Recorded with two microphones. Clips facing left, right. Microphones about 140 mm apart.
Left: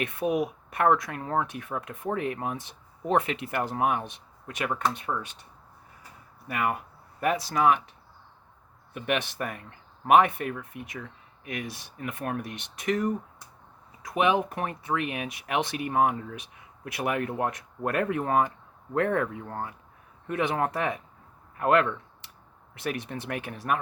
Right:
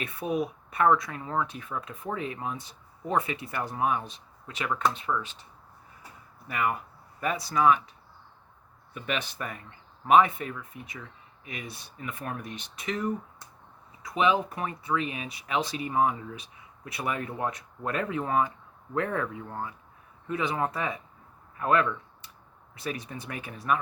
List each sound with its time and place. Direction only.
0.0 s speech: 65° left (ahead or behind)
6.5 s speech: 50° left (ahead or behind)
8.9 s speech: 60° left (ahead or behind)
14.1 s speech: 60° left (ahead or behind)